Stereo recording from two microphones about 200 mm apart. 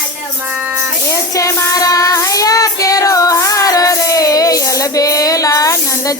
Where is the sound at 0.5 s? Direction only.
10° right (ahead or behind).